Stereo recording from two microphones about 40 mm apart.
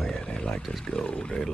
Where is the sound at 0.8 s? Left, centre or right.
Left.